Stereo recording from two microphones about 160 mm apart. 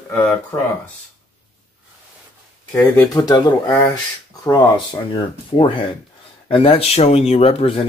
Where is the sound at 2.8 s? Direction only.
10° left (ahead or behind).